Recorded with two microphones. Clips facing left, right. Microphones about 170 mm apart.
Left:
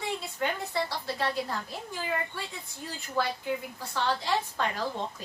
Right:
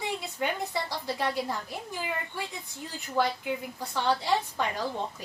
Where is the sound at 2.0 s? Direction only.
15° right (ahead or behind).